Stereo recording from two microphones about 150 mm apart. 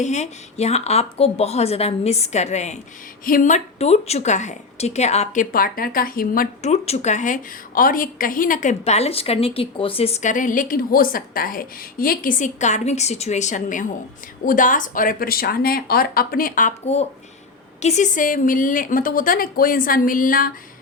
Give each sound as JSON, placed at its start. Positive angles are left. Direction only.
{"t": 0.0, "sound": "a woman's voice", "side_deg": 50}
{"t": 3.2, "sound": "speech", "side_deg": 60}
{"t": 6.6, "sound": "a woman's voice", "side_deg": 50}
{"t": 7.8, "sound": "speech", "side_deg": 65}
{"t": 8.8, "sound": "a woman's voice", "side_deg": 45}